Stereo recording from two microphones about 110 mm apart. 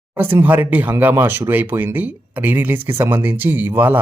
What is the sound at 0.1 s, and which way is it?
Speech, 20° right (ahead or behind).